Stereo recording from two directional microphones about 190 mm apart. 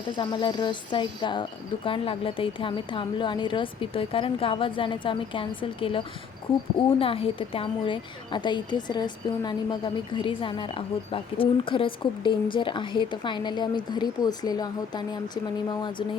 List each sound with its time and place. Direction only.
0.2 s a woman's voice: 25° left (ahead or behind)
7.0 s a woman's voice: 30° left (ahead or behind)